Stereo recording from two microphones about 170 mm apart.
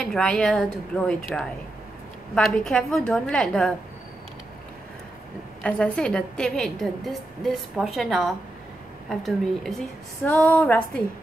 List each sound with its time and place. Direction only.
0.0 s a woman's voice: 5° left (ahead or behind)
2.3 s a woman's voice: 5° left (ahead or behind)
5.6 s a woman's voice: 5° left (ahead or behind)